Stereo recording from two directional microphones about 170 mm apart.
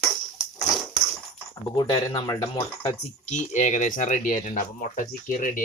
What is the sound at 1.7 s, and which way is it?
Speech, 25° left (ahead or behind).